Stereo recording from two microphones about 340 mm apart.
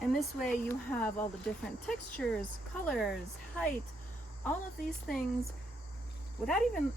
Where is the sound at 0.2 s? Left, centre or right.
Centre.